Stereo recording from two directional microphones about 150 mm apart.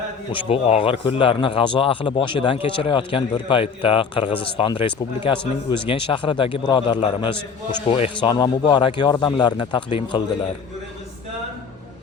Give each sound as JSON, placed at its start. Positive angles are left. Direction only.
{"t": 0.3, "sound": "speech", "side_deg": 35}
{"t": 8.3, "sound": "a man's voice", "side_deg": 30}